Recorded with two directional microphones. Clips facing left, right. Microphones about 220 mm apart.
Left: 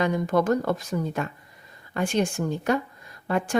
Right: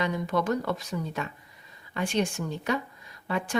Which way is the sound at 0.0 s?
50° left (ahead or behind).